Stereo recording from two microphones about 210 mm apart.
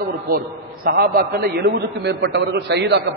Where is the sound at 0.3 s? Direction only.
45° right (ahead or behind).